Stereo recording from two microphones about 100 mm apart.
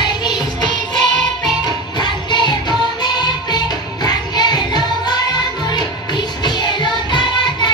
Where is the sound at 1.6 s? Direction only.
50° left (ahead or behind).